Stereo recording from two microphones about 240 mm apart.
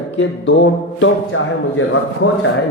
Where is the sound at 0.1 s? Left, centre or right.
Left.